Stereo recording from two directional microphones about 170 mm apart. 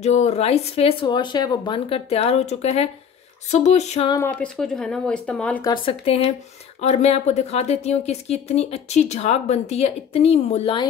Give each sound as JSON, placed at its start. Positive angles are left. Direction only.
{"t": 0.0, "sound": "speech", "side_deg": 40}
{"t": 4.2, "sound": "speech", "side_deg": 5}
{"t": 5.6, "sound": "speech", "side_deg": 25}